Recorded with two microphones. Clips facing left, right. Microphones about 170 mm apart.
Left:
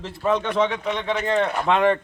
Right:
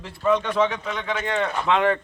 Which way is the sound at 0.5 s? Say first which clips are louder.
Left 1 dB; 25° left (ahead or behind).